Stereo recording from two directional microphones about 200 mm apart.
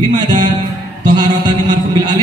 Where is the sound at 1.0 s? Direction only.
20° right (ahead or behind).